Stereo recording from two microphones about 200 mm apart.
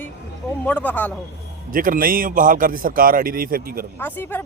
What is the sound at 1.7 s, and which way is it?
A man's voice, 45° right (ahead or behind).